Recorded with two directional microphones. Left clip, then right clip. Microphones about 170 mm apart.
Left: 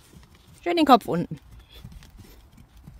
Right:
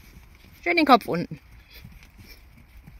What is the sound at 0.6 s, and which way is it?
Speech, 15° left (ahead or behind).